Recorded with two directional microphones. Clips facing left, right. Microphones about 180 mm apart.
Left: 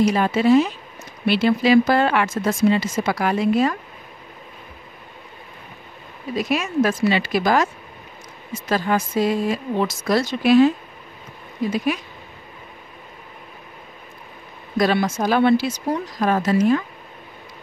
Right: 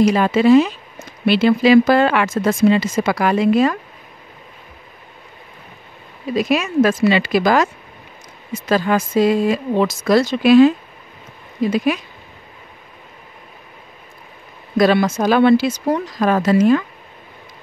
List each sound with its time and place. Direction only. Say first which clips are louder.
0.0 s speech: right 4 dB; 90° right
6.3 s speech: right 4 dB; 90° right
11.7 s speech: right 4 dB; 90° right
14.8 s speech: right 5 dB; 85° right